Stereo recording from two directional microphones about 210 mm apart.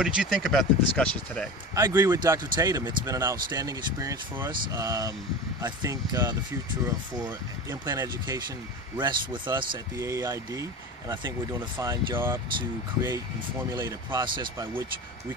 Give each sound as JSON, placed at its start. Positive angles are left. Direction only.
{"t": 0.0, "sound": "speech", "side_deg": -5}
{"t": 1.8, "sound": "speech", "side_deg": -15}
{"t": 13.7, "sound": "speech", "side_deg": -20}